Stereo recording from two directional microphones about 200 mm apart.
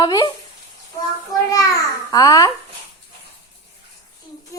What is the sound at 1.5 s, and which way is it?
A child's voice, 15° left (ahead or behind).